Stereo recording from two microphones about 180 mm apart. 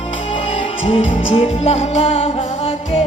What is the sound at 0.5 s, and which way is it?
Music, 30° left (ahead or behind).